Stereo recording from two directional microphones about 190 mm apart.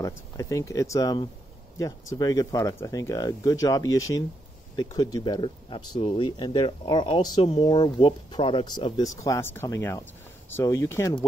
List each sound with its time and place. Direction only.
0.0 s speech: 15° left (ahead or behind)